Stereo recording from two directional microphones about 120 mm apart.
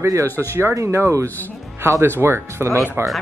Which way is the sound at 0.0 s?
25° right (ahead or behind).